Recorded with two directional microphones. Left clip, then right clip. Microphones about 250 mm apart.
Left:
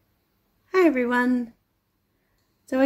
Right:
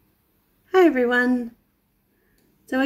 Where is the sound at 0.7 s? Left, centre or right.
Centre.